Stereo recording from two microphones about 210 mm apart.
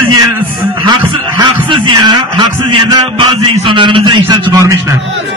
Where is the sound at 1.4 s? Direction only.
20° right (ahead or behind).